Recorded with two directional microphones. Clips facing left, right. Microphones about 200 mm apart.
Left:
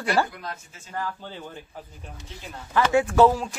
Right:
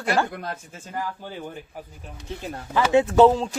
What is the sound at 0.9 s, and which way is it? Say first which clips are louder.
Speech: right 1 dB; 15° right (ahead or behind).